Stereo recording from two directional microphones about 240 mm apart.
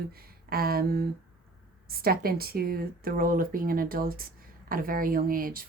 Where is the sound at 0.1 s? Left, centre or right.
Right.